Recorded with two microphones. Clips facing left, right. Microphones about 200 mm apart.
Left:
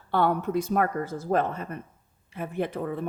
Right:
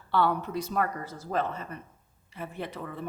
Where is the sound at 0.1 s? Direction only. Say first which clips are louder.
Left 3 dB; 50° left (ahead or behind).